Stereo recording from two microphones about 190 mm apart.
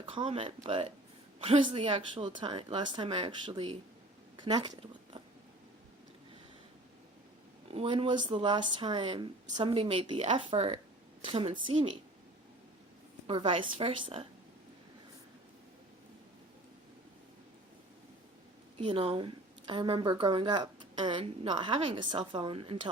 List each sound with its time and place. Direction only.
0.0 s a woman's voice: 30° right (ahead or behind)
7.7 s a woman's voice: 30° right (ahead or behind)
13.2 s a woman's voice: 25° right (ahead or behind)
18.8 s a woman's voice: 30° right (ahead or behind)